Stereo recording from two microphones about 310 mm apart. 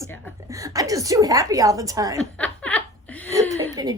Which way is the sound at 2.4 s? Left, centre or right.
Centre.